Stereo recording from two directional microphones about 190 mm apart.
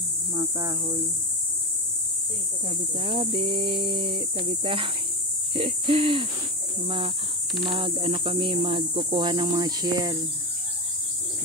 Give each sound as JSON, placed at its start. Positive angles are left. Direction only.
{"t": 0.3, "sound": "insect", "side_deg": -15}
{"t": 3.0, "sound": "speech", "side_deg": -25}
{"t": 7.6, "sound": "speech", "side_deg": -25}